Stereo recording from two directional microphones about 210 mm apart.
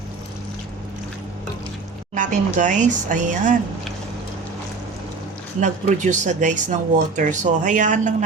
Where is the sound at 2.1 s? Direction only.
35° right (ahead or behind).